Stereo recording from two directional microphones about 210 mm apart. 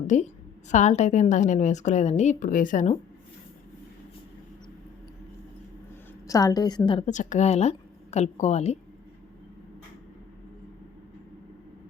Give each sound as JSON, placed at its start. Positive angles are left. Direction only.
{"t": 0.1, "sound": "a woman's voice", "side_deg": 35}
{"t": 6.2, "sound": "a woman's voice", "side_deg": 15}